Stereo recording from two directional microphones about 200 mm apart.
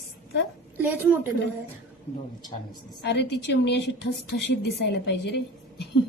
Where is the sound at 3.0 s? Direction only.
60° left (ahead or behind).